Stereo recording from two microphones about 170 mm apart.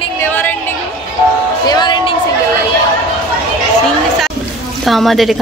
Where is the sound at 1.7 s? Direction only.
25° left (ahead or behind).